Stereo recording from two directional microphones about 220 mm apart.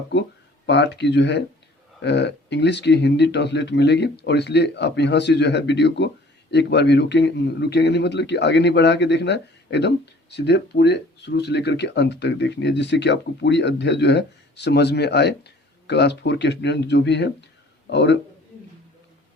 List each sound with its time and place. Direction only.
0.1 s a man's voice: 50° left (ahead or behind)